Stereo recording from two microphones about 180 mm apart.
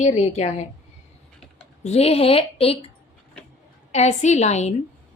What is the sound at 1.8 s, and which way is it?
Speech, 35° left (ahead or behind).